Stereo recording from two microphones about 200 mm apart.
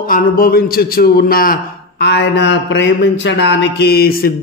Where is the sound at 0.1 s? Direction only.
45° left (ahead or behind).